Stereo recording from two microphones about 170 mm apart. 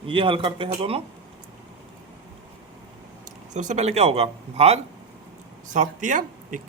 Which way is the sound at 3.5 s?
45° right (ahead or behind).